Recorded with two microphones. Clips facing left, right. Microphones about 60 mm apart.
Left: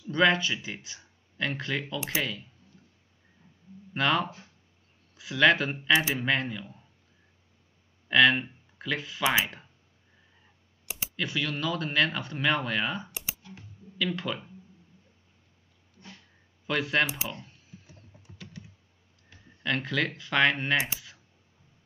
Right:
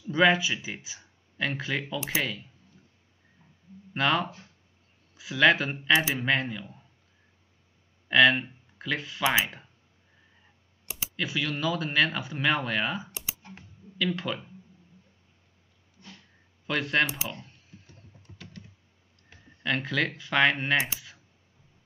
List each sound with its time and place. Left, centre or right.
0.1 s speech: centre
3.9 s speech: centre
8.1 s speech: centre
11.1 s speech: centre
16.6 s typing: centre
19.3 s speech: centre